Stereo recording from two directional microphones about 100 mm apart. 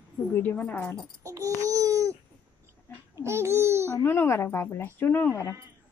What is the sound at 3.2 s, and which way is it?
Babbling, 25° right (ahead or behind).